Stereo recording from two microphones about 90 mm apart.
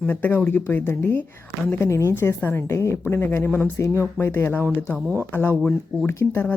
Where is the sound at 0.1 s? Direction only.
20° left (ahead or behind).